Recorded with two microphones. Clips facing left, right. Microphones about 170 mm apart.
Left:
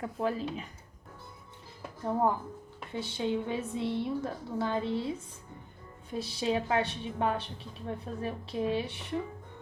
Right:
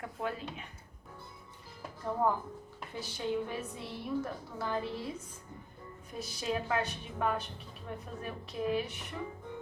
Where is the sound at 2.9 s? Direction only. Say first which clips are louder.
Left 3 dB; 25° left (ahead or behind).